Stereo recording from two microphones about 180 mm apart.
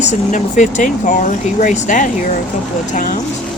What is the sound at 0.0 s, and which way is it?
Speech, 40° left (ahead or behind).